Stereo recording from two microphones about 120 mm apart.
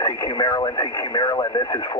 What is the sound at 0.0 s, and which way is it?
Speech, 40° left (ahead or behind).